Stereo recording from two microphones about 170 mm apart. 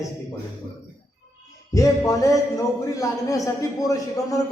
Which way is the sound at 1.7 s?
20° left (ahead or behind).